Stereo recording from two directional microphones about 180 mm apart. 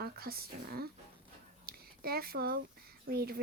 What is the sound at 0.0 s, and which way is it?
Speech, 60° right (ahead or behind).